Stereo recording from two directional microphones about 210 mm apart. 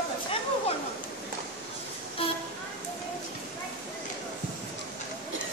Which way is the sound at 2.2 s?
25° left (ahead or behind).